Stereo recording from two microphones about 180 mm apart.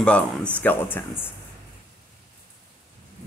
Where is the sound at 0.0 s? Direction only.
5° left (ahead or behind).